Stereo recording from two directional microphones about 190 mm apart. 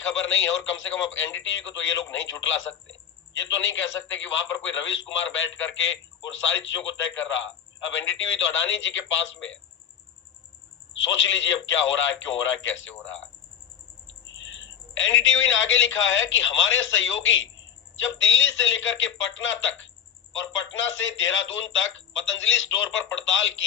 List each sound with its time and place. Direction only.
0.2 s a man's voice: 85° left
10.9 s a man's voice: 85° left
14.3 s a woman's voice: 80° left